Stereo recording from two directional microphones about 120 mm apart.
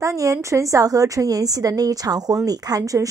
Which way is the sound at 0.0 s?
25° right (ahead or behind).